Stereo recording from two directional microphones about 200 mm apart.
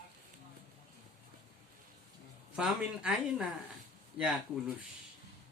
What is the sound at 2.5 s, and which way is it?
Speech, 5° right (ahead or behind).